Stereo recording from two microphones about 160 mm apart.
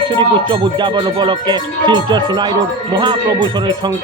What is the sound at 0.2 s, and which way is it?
Speech, 30° right (ahead or behind).